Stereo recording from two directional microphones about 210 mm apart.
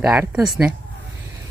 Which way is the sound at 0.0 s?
5° right (ahead or behind).